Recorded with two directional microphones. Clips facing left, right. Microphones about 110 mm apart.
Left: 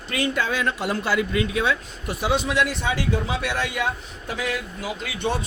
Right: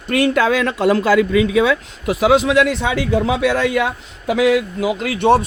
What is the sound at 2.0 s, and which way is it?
A man's voice, 90° right.